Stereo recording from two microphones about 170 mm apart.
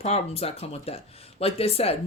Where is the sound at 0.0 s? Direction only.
35° left (ahead or behind).